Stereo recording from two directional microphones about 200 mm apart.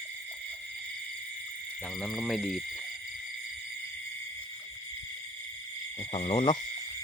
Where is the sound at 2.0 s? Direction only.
Centre (ahead or behind).